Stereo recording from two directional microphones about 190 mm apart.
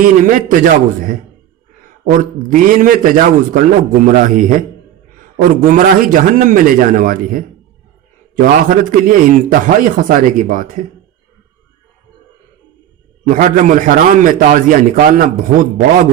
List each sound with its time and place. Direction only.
0.0 s a man's voice: 45° right (ahead or behind)
13.2 s a man's voice: 45° right (ahead or behind)